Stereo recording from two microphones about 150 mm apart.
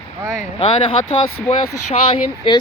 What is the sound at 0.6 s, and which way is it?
Speech, 35° left (ahead or behind).